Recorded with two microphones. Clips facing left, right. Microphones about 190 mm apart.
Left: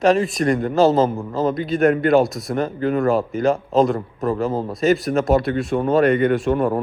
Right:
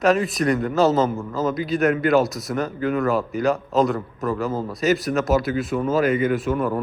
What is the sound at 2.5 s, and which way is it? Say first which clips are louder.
Speech: left 2 dB; 40° left (ahead or behind).